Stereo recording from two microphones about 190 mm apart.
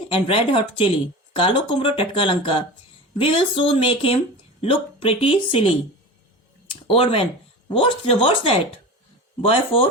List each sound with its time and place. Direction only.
0.1 s speech: 30° left (ahead or behind)